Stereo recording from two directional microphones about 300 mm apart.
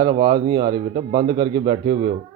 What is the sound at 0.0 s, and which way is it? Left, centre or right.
Speech, centre.